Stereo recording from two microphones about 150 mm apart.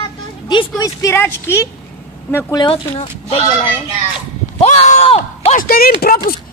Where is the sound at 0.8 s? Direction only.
20° left (ahead or behind).